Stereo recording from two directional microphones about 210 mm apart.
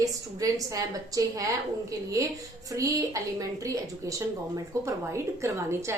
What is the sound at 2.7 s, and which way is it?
A woman's voice, 15° right (ahead or behind).